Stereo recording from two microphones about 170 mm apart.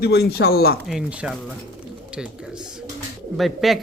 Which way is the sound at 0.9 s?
5° right (ahead or behind).